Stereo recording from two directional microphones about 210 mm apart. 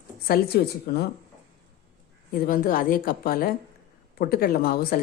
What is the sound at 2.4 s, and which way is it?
A woman's voice, 40° left (ahead or behind).